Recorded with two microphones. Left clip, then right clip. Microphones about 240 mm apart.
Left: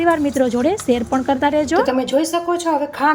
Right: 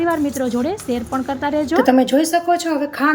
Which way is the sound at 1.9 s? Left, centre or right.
Centre.